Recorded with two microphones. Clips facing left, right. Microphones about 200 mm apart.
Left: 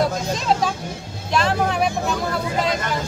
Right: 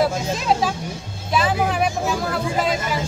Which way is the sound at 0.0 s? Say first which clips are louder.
Right 1 dB; 5° right (ahead or behind).